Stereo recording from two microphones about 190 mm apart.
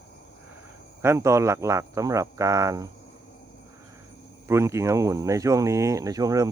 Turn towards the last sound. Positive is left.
turn(degrees=-20)  # may be behind; listen again after turning